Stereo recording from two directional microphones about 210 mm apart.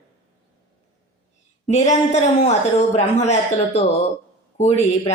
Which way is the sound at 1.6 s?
35° left (ahead or behind).